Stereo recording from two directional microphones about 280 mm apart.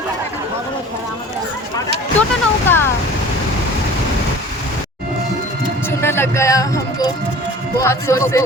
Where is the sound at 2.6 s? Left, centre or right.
Centre.